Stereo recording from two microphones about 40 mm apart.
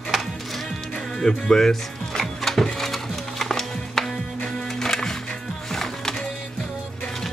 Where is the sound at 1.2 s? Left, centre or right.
Centre.